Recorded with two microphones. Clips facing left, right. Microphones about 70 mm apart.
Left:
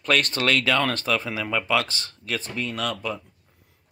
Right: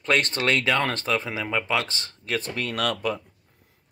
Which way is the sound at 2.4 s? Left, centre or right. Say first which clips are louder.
Right 1 dB; right.